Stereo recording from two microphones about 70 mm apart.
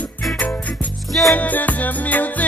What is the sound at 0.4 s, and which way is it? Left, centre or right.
Music, left.